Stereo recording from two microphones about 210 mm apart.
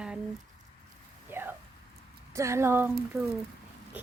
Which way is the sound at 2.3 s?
15° right (ahead or behind).